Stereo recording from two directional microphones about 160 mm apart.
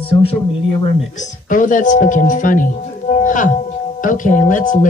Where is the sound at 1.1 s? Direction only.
50° left (ahead or behind).